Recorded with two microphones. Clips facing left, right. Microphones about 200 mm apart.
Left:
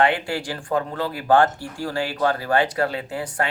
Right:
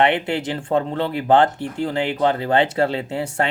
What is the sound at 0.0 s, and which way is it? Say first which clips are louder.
Speech: right 2 dB; 20° right (ahead or behind).